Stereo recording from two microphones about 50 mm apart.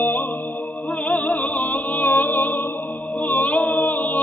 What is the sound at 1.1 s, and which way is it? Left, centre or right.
Music, left.